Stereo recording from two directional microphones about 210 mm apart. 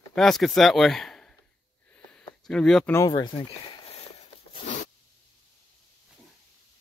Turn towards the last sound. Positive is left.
turn(degrees=35)  # may be behind; listen again after turning